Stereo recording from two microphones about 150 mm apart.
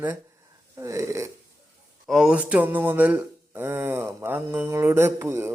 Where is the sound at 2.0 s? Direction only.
5° right (ahead or behind).